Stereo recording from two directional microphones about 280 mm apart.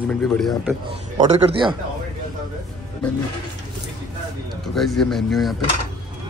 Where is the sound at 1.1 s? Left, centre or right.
Centre.